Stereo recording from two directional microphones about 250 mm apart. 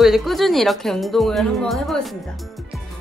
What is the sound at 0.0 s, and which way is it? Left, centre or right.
A woman's voice, centre.